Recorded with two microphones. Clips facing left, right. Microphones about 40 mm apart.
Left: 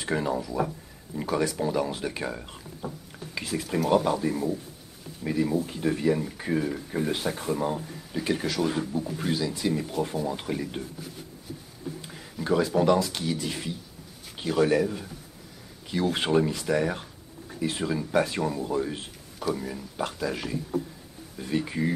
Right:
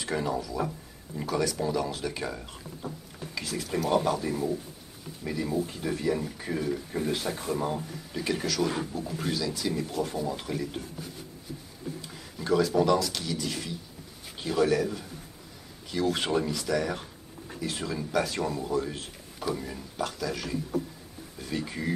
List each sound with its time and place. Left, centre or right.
0.0 s speech: centre
3.3 s speech: left
3.8 s speech: centre
7.5 s speech: centre
8.2 s speech: centre
9.3 s speech: left
12.1 s a sound: centre
12.4 s speech: centre
18.4 s speech: centre
18.7 s speech: centre
19.4 s speech: centre
20.0 s speech: left